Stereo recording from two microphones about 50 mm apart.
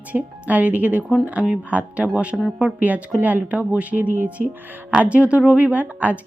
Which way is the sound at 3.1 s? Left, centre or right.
Right.